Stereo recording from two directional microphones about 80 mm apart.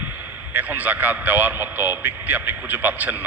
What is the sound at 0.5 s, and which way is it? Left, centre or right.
A man's voice, right.